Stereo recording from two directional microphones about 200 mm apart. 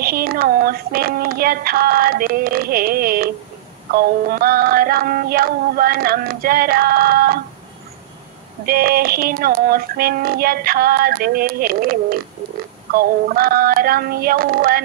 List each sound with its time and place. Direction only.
0.0 s female singing: 50° right (ahead or behind)
8.6 s female singing: 50° right (ahead or behind)